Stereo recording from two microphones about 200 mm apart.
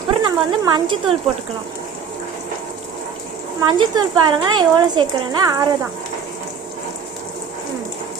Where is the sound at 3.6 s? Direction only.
20° right (ahead or behind).